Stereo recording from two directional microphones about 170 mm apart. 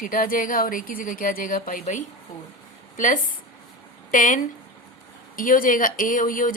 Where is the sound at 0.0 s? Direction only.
55° left (ahead or behind).